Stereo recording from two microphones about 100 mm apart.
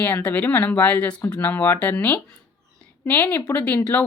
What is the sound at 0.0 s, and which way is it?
Speech, 15° left (ahead or behind).